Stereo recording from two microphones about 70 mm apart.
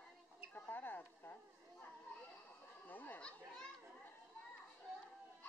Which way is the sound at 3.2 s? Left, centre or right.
Centre.